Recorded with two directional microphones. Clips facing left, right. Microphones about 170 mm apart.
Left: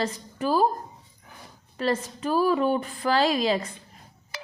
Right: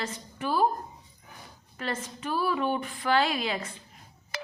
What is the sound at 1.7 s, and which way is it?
A woman's voice, 35° left (ahead or behind).